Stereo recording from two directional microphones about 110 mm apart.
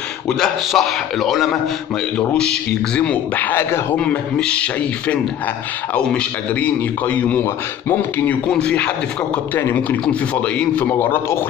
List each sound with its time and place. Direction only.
0.4 s a man's voice: centre (ahead or behind); by 11.3 s 20° left (ahead or behind)